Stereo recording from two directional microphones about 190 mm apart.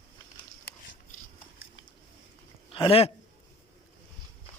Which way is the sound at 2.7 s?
30° left (ahead or behind).